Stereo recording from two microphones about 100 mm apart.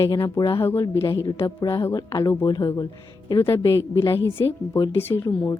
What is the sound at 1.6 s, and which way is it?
Speech, 30° left (ahead or behind).